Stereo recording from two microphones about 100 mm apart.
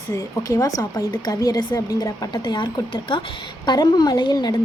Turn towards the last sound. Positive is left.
turn(degrees=45)  # may be behind; listen again after turning